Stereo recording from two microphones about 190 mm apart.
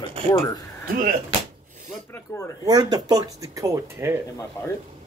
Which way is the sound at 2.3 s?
15° left (ahead or behind).